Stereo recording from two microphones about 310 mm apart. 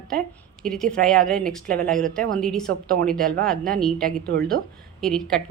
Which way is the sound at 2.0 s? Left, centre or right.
Centre.